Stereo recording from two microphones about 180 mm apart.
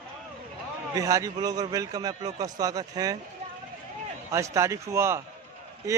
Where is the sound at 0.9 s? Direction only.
20° right (ahead or behind).